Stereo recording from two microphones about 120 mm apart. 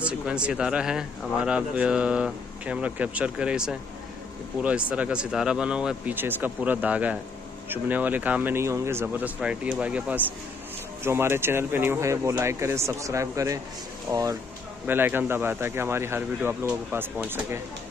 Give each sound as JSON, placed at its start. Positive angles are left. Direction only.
{"t": 0.0, "sound": "speech", "side_deg": -10}
{"t": 9.4, "sound": "speech", "side_deg": -10}
{"t": 14.9, "sound": "speech", "side_deg": -15}